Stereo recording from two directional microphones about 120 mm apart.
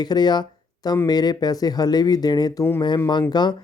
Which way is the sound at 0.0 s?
35° left (ahead or behind).